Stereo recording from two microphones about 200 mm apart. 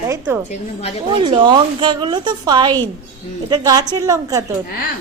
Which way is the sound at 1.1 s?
25° right (ahead or behind).